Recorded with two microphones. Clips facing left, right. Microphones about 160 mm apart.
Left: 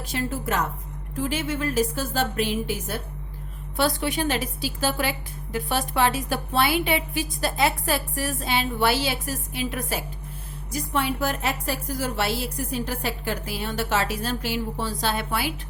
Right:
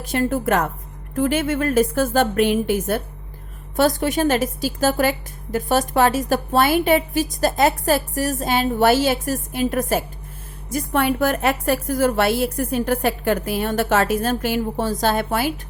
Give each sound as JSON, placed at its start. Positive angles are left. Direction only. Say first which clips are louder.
{"t": 0.0, "sound": "a woman's voice", "louder": "right 8 dB", "side_deg": -55}